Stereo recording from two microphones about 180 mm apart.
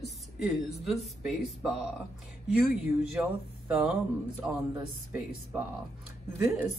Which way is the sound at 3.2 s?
Centre (ahead or behind).